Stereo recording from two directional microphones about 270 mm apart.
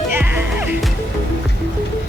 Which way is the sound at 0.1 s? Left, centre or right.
Centre.